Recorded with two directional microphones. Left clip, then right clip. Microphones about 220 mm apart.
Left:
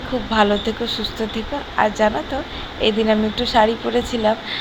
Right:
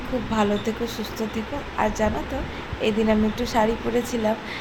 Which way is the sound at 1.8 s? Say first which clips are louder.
Left 6 dB; 20° left (ahead or behind).